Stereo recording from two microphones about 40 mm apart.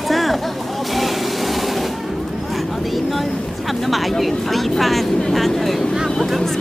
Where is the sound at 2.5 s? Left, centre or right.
Centre.